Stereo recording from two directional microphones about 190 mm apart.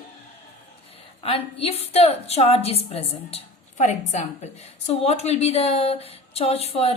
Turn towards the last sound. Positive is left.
turn(degrees=30)  # may be behind; listen again after turning